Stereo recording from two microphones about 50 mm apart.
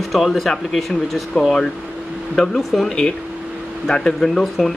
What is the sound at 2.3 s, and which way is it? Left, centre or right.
Speech, centre.